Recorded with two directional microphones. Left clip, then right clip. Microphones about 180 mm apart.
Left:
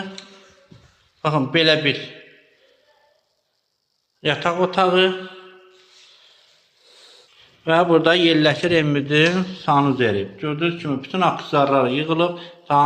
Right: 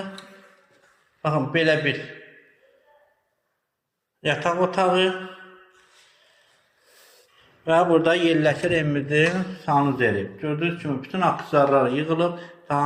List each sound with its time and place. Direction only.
1.2 s a man's voice: 35° left (ahead or behind)
4.4 s a man's voice: 25° left (ahead or behind)
7.6 s a man's voice: 35° left (ahead or behind)